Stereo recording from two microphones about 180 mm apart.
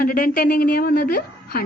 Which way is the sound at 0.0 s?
55° left (ahead or behind).